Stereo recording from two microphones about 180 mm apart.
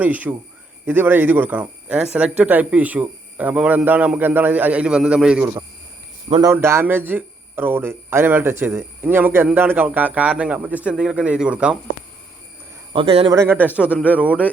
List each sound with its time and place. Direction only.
0.0 s speech: 10° right (ahead or behind)
12.9 s a man's voice: 30° right (ahead or behind)
13.3 s speech: 15° right (ahead or behind)
13.9 s speech: 10° left (ahead or behind)